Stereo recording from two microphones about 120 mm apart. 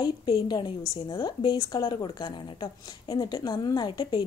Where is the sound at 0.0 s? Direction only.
35° left (ahead or behind).